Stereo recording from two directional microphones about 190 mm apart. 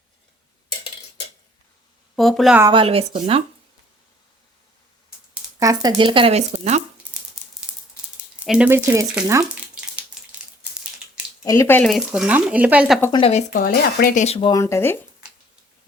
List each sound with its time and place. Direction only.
2.1 s speech: centre (ahead or behind)
2.7 s speech: 30° right (ahead or behind)
5.5 s speech: 20° right (ahead or behind); by 6.8 s 35° right (ahead or behind)
7.4 s a sound: centre (ahead or behind)
8.4 s speech: 5° right (ahead or behind)
11.4 s speech: 15° left (ahead or behind)
11.9 s speech: centre (ahead or behind)
13.1 s speech: 25° left (ahead or behind)
13.5 s speech: 50° left (ahead or behind)
14.3 s speech: 30° left (ahead or behind)
14.6 s speech: 15° left (ahead or behind)